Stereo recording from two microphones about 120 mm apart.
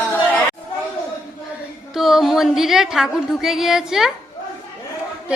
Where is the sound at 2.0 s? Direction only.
Centre (ahead or behind).